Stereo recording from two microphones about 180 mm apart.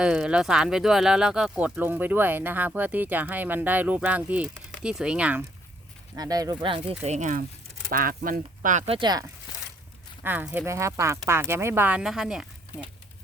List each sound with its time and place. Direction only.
0.0 s speech: 5° right (ahead or behind)
6.1 s speech: 20° right (ahead or behind)
7.0 s speech: 40° right (ahead or behind)
8.9 s speech: 25° right (ahead or behind)
10.2 s speech: 10° right (ahead or behind)